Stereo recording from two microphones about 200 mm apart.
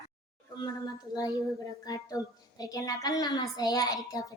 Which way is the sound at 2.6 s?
20° left (ahead or behind).